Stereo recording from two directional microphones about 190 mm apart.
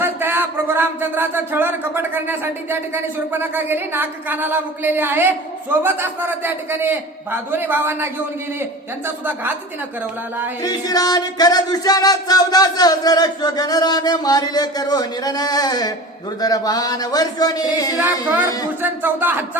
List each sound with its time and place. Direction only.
0.0 s speech: 10° right (ahead or behind)
10.6 s music: 20° left (ahead or behind)
18.8 s speech: 10° right (ahead or behind)